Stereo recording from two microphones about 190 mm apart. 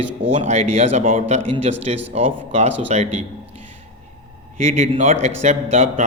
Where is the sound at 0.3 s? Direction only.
35° right (ahead or behind).